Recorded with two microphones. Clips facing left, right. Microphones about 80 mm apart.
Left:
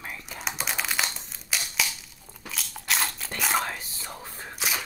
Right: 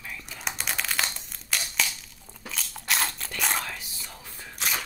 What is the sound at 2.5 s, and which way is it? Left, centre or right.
Crunch, centre.